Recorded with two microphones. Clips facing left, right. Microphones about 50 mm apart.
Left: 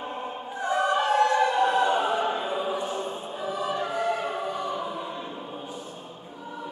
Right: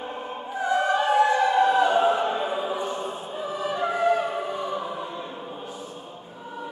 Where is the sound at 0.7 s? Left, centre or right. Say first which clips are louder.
Right 1 dB; right.